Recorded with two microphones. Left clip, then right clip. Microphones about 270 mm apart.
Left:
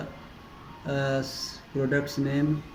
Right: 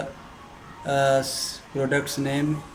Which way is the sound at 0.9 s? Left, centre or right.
Centre.